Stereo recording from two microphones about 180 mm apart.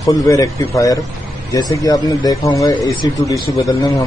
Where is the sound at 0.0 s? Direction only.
20° left (ahead or behind).